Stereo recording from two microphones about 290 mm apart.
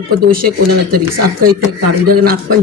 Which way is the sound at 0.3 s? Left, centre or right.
Right.